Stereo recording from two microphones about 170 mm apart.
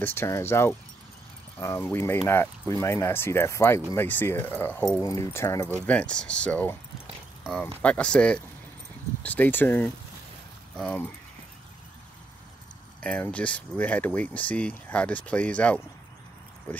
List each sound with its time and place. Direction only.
0.0 s speech: 15° left (ahead or behind)
13.0 s speech: 5° left (ahead or behind)